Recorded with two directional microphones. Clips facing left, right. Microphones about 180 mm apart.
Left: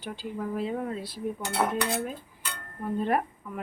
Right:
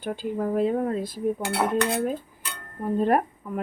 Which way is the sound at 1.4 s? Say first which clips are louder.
Left 1 dB; 5° right (ahead or behind).